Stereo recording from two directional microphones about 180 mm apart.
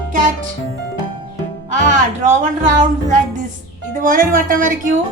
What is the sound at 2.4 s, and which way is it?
Speech, 45° right (ahead or behind).